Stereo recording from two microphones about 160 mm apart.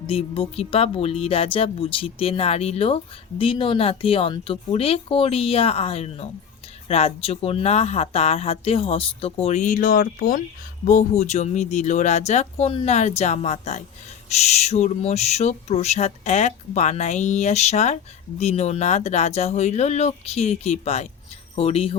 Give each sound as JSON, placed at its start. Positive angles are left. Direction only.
{"t": 0.1, "sound": "speech", "side_deg": 35}
{"t": 10.8, "sound": "owl", "side_deg": 45}
{"t": 21.5, "sound": "speech", "side_deg": 35}